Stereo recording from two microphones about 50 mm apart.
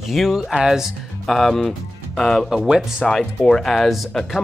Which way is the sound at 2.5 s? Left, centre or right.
Centre.